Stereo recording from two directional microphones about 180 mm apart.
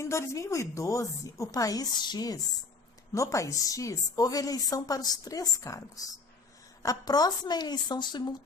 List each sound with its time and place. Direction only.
0.0 s a woman's voice: 15° left (ahead or behind)